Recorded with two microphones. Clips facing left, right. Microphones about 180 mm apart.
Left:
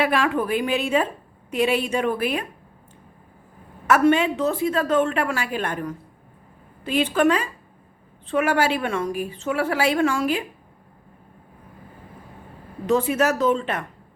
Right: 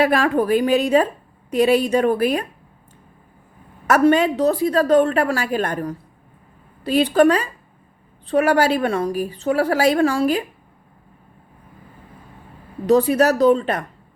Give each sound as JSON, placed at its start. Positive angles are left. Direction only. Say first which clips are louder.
{"t": 0.0, "sound": "a woman's voice", "louder": "right 4 dB", "side_deg": -40}
{"t": 3.8, "sound": "a woman's voice", "louder": "right 3 dB", "side_deg": -40}
{"t": 12.9, "sound": "a woman's voice", "louder": "right 5 dB", "side_deg": -40}